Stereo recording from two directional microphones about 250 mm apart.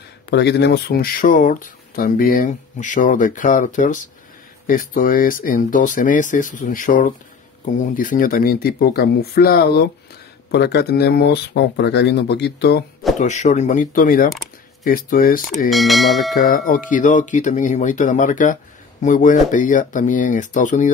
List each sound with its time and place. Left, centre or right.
0.3 s speech: left
13.2 s speech: left
15.7 s speech: centre
16.3 s speech: left